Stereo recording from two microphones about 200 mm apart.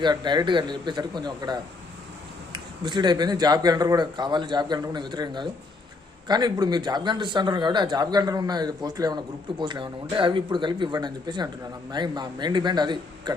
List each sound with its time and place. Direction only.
0.0 s speech: 20° right (ahead or behind)